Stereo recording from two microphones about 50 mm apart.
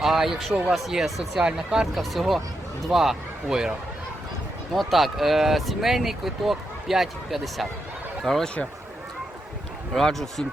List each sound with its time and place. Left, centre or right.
0.0 s speech: centre
2.0 s speech: centre
4.7 s speech: centre
9.9 s speech: centre